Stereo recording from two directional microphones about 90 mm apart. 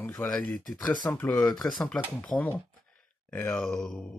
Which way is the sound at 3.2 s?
15° left (ahead or behind).